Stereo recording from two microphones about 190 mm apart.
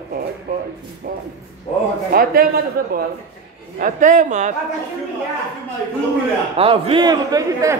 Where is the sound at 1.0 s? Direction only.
50° right (ahead or behind).